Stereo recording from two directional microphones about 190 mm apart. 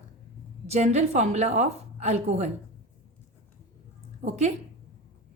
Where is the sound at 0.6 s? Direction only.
35° right (ahead or behind).